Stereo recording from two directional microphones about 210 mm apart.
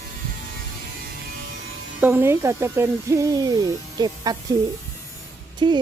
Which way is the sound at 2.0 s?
10° right (ahead or behind).